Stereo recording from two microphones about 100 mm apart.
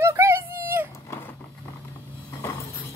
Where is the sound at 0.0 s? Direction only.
25° right (ahead or behind).